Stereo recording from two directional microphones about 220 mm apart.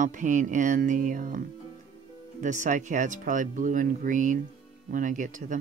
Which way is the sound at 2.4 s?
35° right (ahead or behind).